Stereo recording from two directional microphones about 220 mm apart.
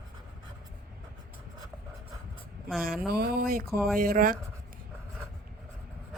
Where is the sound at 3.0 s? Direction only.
45° right (ahead or behind).